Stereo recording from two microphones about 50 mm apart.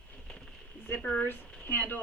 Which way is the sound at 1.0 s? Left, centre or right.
Left.